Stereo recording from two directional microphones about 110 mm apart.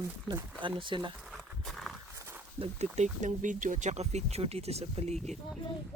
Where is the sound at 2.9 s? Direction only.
90° right.